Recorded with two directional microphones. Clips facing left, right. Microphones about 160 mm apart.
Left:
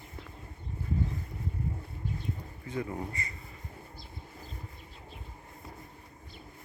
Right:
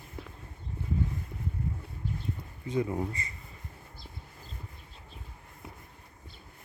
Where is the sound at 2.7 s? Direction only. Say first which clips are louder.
Right 5 dB; 20° right (ahead or behind).